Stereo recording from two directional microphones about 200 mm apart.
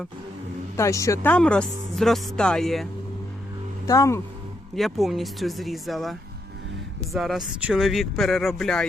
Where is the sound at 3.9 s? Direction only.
15° left (ahead or behind).